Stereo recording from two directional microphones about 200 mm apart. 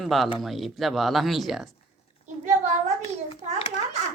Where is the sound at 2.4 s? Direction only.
35° right (ahead or behind).